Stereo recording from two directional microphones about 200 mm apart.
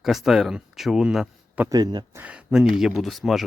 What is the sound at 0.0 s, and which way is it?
Speech, centre (ahead or behind).